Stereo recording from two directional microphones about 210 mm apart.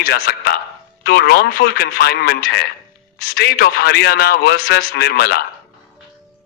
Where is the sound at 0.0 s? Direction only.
50° left (ahead or behind).